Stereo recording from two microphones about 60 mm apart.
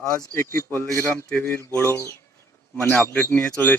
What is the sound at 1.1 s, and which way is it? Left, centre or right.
Speech, left.